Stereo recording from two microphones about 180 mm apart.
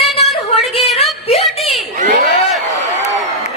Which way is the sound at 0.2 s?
35° left (ahead or behind).